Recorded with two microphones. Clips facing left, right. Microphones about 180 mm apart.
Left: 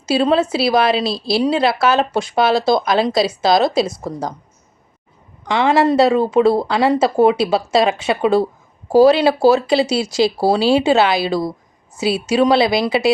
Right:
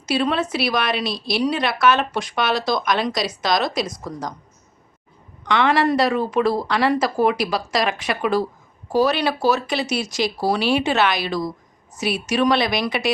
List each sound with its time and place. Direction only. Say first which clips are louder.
0.0 s a woman's voice: left 6 dB; 30° left (ahead or behind)
5.5 s a woman's voice: left 4 dB; 25° left (ahead or behind)